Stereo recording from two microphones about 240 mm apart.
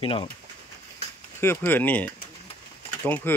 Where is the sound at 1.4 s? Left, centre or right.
Centre.